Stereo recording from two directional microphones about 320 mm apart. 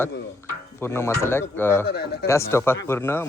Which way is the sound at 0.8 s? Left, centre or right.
Centre.